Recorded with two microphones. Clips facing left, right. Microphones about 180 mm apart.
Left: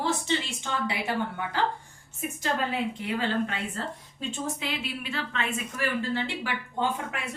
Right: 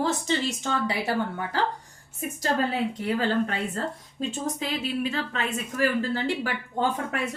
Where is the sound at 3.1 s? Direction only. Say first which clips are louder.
Right 2 dB; 40° right (ahead or behind).